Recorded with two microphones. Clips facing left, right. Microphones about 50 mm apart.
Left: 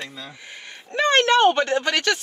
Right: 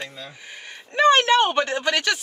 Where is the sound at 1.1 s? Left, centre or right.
Centre.